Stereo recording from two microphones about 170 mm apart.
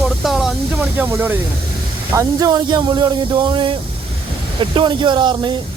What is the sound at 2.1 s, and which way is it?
Speech, 25° right (ahead or behind).